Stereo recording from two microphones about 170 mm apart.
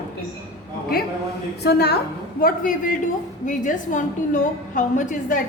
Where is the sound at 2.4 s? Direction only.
55° left (ahead or behind).